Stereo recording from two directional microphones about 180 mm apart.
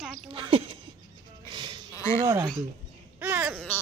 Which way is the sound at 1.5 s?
25° right (ahead or behind).